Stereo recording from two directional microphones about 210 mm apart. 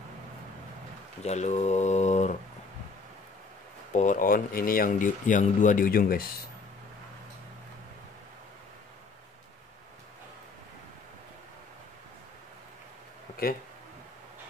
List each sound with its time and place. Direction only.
1.2 s speech: 35° left (ahead or behind)
3.9 s speech: 35° left (ahead or behind)